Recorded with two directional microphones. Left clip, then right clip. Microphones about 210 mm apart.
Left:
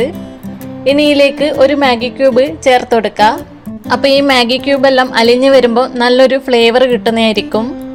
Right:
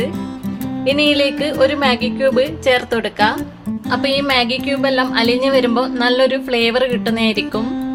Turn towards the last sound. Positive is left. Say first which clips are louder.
# left 6 dB
turn(degrees=25)  # may be behind; listen again after turning